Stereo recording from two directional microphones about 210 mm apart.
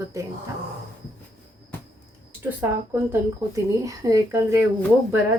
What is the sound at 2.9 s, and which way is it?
Speech, 15° right (ahead or behind).